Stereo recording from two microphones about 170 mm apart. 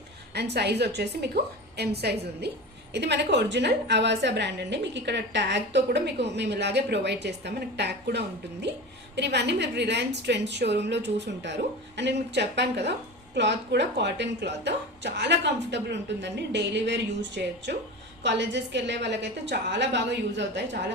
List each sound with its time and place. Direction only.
0.3 s a woman's voice: 80° right
2.9 s a woman's voice: 85° right